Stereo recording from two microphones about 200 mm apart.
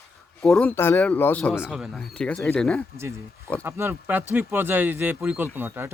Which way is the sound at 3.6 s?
15° right (ahead or behind).